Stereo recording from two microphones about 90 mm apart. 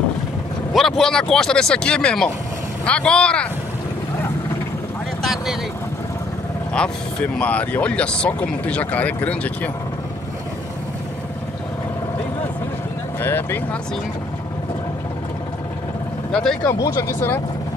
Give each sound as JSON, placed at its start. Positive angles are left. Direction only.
{"t": 0.7, "sound": "speech", "side_deg": 5}
{"t": 5.2, "sound": "speech", "side_deg": 0}
{"t": 7.3, "sound": "speech", "side_deg": 15}
{"t": 13.2, "sound": "speech", "side_deg": 25}
{"t": 16.3, "sound": "speech", "side_deg": 10}
{"t": 16.6, "sound": "speech", "side_deg": 30}